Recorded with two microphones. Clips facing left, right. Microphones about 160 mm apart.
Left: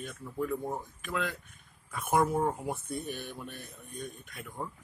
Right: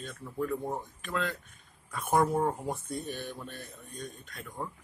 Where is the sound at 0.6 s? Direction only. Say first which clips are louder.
Right 1 dB; 15° right (ahead or behind).